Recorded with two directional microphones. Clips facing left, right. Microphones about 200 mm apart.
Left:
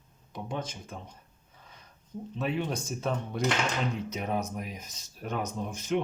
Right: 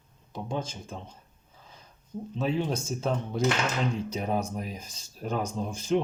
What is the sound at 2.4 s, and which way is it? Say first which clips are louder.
Speech: right 3 dB; 30° right (ahead or behind).